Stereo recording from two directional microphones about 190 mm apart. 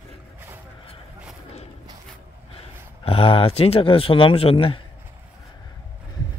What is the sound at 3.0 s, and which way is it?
Speech, 30° left (ahead or behind).